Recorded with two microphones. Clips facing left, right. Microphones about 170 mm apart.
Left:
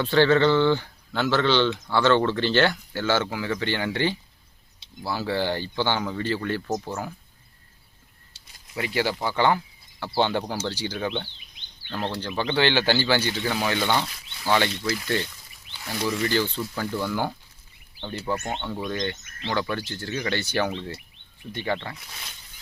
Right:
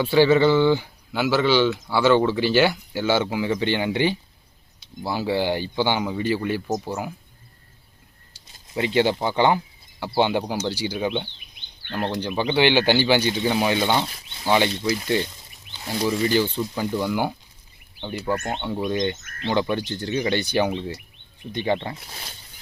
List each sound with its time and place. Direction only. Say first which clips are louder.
0.0 s speech: right 2 dB; 10° right (ahead or behind)
8.5 s speech: right 6 dB; 25° right (ahead or behind)
11.3 s a sound: right 2 dB; 60° right (ahead or behind)
11.9 s speech: right 4 dB; 15° right (ahead or behind); by 22.4 s 35° right (ahead or behind)